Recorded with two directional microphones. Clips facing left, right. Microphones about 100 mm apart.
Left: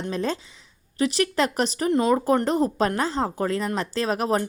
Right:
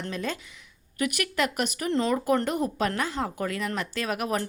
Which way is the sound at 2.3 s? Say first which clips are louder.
Left 4 dB; 30° left (ahead or behind).